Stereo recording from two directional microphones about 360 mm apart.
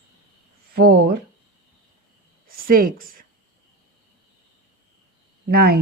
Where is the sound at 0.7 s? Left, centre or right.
Right.